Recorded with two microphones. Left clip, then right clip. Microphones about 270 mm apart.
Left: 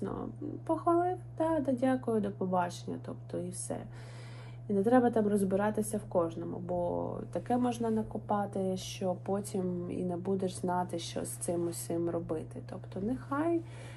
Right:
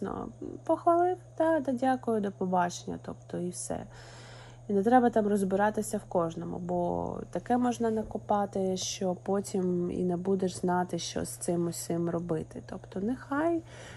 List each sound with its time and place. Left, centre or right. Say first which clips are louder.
0.0 s speech: right 2 dB; right